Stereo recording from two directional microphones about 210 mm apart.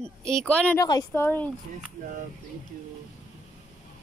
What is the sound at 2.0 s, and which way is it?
Speech, 40° right (ahead or behind).